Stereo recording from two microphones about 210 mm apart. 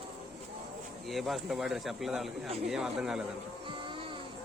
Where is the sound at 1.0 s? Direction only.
Centre (ahead or behind).